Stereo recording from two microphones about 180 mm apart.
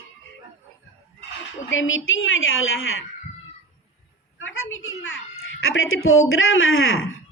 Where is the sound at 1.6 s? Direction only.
90° left.